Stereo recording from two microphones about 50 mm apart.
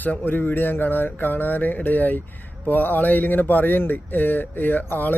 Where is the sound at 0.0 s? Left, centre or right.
Left.